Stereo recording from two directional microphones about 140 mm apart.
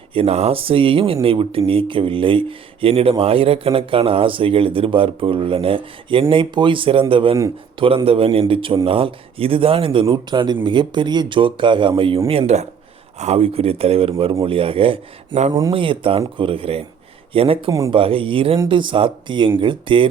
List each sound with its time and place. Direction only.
0.1 s speech: 45° right (ahead or behind)
12.3 s speech: 50° right (ahead or behind)
17.7 s speech: 25° right (ahead or behind)
17.9 s speech: 40° right (ahead or behind)